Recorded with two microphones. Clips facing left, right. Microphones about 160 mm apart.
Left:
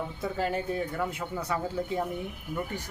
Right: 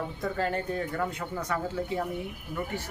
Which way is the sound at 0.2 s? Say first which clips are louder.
Even; 10° left (ahead or behind).